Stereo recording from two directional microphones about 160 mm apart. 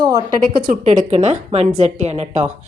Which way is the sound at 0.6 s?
50° right (ahead or behind).